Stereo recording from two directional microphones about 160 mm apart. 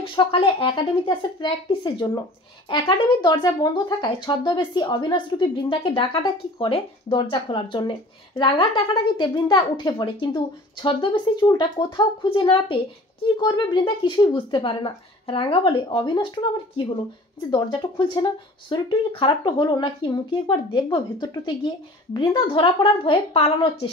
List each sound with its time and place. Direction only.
0.0 s a woman's voice: 30° left (ahead or behind)